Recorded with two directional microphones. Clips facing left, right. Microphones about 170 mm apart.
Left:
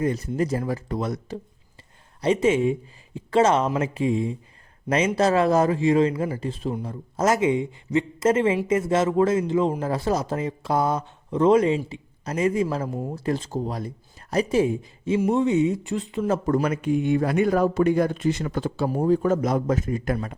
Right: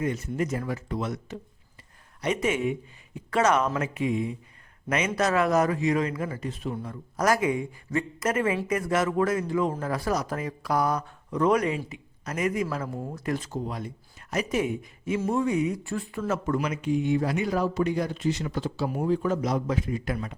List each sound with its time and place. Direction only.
0.0 s speech: 35° left (ahead or behind); by 16.2 s 20° left (ahead or behind)
16.2 s speech: 35° left (ahead or behind)
16.6 s speech: 55° left (ahead or behind)
18.9 s speech: 40° left (ahead or behind)